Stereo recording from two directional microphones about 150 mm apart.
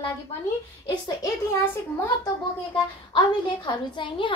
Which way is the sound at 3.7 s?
30° left (ahead or behind).